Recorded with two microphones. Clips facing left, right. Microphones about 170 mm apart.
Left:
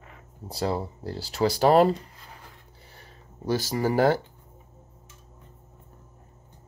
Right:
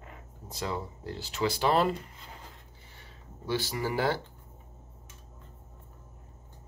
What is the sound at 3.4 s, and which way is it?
Speech, 40° left (ahead or behind).